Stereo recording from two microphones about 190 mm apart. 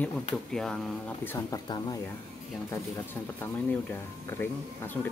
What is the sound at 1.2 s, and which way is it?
Speech, 20° left (ahead or behind).